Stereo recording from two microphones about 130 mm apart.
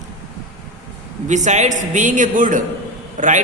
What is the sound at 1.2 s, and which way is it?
A man's voice, 70° right (ahead or behind).